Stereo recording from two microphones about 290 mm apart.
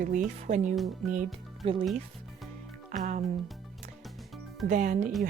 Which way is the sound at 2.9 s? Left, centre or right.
Right.